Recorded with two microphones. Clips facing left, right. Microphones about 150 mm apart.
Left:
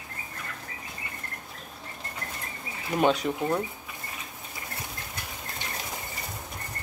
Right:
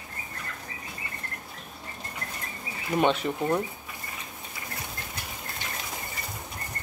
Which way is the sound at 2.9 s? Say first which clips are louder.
Even; centre (ahead or behind).